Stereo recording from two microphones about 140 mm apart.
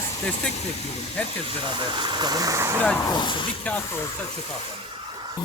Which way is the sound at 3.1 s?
35° left (ahead or behind).